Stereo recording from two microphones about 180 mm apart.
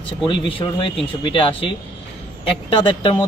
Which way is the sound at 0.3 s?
25° left (ahead or behind).